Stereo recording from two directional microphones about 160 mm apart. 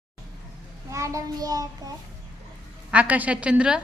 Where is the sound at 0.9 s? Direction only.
20° right (ahead or behind).